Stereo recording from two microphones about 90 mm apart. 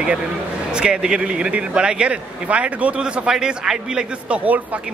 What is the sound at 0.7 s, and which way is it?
Speech, 10° right (ahead or behind).